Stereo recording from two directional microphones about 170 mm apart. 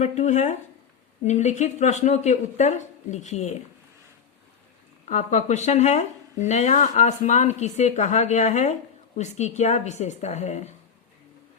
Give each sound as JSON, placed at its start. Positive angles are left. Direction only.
{"t": 0.0, "sound": "speech", "side_deg": 40}
{"t": 5.0, "sound": "speech", "side_deg": 45}